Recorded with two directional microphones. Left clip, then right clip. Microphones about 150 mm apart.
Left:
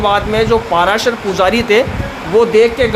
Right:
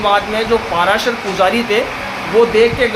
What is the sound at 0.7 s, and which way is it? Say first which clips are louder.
Speech: left 2 dB; 90° left.